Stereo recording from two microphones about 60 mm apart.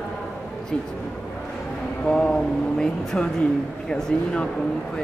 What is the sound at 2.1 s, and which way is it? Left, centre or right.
Speech, centre.